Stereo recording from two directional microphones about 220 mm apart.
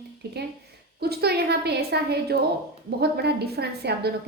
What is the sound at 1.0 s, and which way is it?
A woman's voice, 45° right (ahead or behind).